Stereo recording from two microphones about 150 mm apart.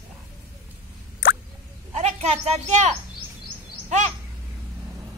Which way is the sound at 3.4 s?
55° right (ahead or behind).